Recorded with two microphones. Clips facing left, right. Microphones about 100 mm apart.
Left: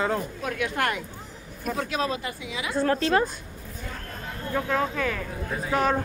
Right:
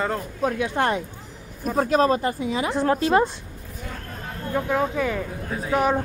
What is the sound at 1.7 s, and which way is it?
Speech, 40° right (ahead or behind).